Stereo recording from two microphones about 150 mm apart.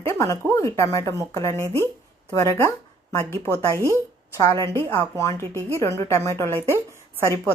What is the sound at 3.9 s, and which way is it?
A woman's voice, 20° left (ahead or behind).